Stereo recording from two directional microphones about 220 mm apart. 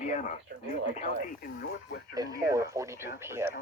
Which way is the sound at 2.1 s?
15° right (ahead or behind).